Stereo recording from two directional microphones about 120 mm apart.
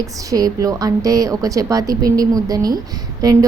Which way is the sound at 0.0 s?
30° right (ahead or behind).